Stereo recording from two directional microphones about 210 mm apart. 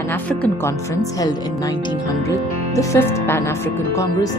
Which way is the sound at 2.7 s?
10° left (ahead or behind).